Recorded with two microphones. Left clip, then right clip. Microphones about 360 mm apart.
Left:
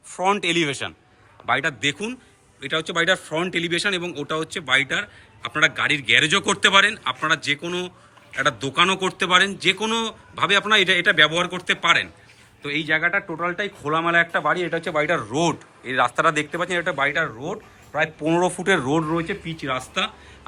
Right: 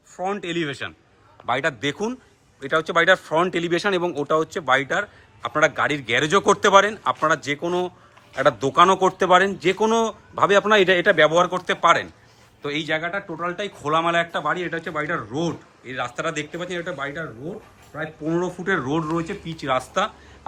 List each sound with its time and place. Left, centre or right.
0.1 s speech: centre
1.5 s a man's voice: centre
14.4 s speech: centre
18.3 s speech: centre